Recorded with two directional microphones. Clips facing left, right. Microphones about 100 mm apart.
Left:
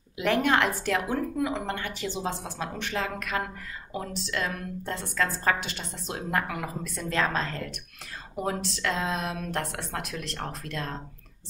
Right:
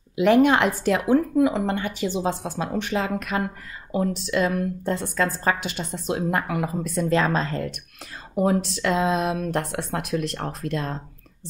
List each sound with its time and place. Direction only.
0.2 s a woman's voice: 15° right (ahead or behind)